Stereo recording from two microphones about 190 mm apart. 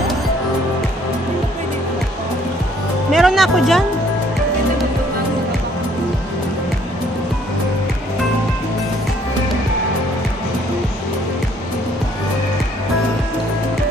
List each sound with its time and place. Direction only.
3.1 s speech: centre (ahead or behind)